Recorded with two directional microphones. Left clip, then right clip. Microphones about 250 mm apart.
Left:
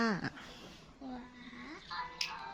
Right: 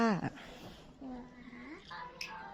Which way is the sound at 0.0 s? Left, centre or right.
Centre.